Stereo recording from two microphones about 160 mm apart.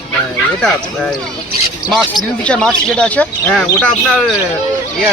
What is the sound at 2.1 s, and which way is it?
Speech, 5° left (ahead or behind).